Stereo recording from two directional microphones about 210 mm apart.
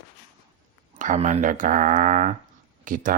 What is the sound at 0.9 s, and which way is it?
Speech, 35° right (ahead or behind).